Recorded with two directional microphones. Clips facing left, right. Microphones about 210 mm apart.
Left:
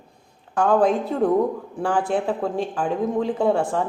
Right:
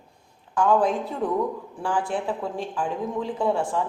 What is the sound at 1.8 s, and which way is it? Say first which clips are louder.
A woman's voice: left 4 dB; 60° left (ahead or behind).